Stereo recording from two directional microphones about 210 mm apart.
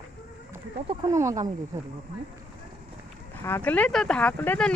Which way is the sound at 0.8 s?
15° right (ahead or behind).